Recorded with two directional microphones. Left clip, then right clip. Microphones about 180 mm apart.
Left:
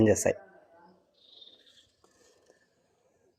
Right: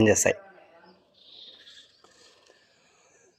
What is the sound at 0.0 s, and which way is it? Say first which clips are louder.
Speech: right 3 dB; 20° left (ahead or behind).